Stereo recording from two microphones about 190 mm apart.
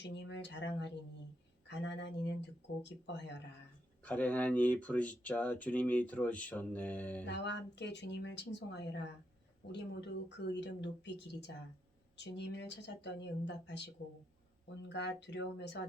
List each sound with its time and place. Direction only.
0.0 s speech: 65° left (ahead or behind)
4.0 s speech: 5° left (ahead or behind)
7.3 s speech: 65° left (ahead or behind)